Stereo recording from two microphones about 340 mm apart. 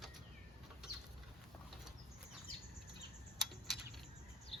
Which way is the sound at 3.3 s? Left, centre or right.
Centre.